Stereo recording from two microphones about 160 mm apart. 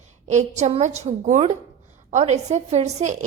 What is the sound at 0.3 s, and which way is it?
A woman's voice, 45° right (ahead or behind).